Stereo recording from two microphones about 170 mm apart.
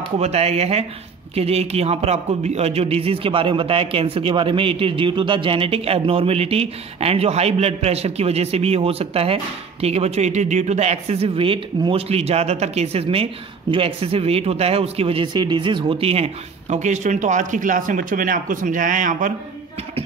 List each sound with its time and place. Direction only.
0.2 s a man's voice: 40° right (ahead or behind)